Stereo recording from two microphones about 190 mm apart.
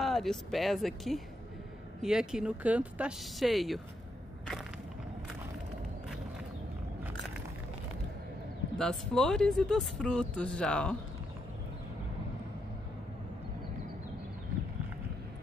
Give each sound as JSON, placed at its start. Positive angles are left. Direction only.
{"t": 0.0, "sound": "speech", "side_deg": 0}
{"t": 8.7, "sound": "speech", "side_deg": 0}